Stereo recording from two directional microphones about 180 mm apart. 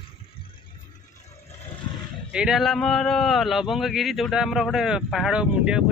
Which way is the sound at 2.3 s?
Centre (ahead or behind).